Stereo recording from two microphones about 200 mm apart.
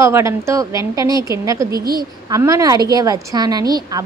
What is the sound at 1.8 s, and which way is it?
Speech, 50° right (ahead or behind).